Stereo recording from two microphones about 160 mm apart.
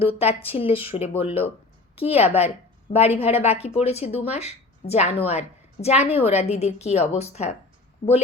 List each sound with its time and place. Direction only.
0.0 s speech: 35° left (ahead or behind)